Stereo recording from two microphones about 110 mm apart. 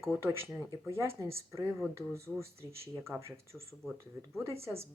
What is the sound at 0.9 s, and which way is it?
Speech, 25° right (ahead or behind).